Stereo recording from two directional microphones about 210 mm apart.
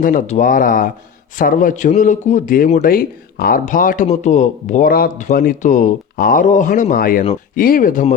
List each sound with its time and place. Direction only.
0.0 s a man's voice: 40° left (ahead or behind)